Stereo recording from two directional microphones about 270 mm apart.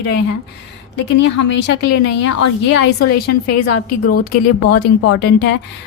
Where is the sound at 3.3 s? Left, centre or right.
Left.